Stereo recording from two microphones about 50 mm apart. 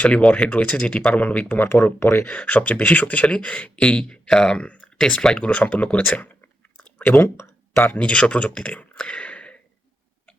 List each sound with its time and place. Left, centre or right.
0.3 s speech: left
1.1 s speech: left
1.7 s speech: left
2.2 s speech: left
5.5 s speech: left
7.0 s speech: left
7.8 s speech: left